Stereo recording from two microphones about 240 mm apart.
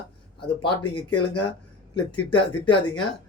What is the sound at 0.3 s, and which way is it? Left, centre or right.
Speech, left.